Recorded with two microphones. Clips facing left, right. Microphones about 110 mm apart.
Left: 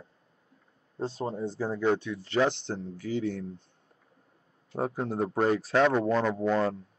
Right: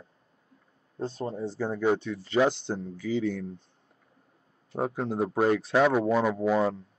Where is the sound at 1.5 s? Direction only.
5° left (ahead or behind).